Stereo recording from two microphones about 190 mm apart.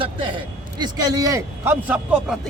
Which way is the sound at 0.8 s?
20° right (ahead or behind).